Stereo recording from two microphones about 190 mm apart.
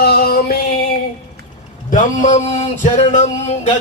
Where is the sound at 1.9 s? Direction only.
40° left (ahead or behind).